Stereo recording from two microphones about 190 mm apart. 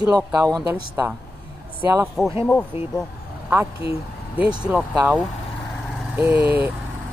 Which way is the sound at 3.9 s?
5° right (ahead or behind).